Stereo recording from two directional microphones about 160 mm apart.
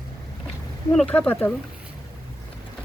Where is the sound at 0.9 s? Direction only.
10° left (ahead or behind).